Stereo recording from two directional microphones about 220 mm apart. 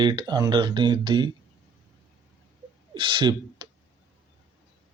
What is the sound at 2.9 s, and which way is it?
Speech, 20° right (ahead or behind).